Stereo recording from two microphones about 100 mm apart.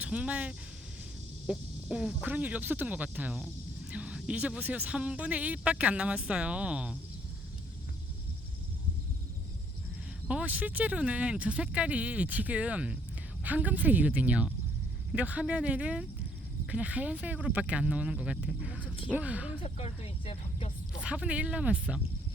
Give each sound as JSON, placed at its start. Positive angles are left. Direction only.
{"t": 0.0, "sound": "speech", "side_deg": -10}
{"t": 10.2, "sound": "speech", "side_deg": -15}
{"t": 19.6, "sound": "a sound", "side_deg": 75}
{"t": 21.0, "sound": "speech", "side_deg": -10}